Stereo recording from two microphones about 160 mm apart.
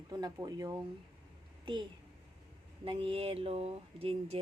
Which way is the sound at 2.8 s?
35° right (ahead or behind).